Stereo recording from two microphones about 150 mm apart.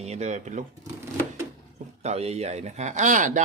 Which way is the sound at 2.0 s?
45° right (ahead or behind).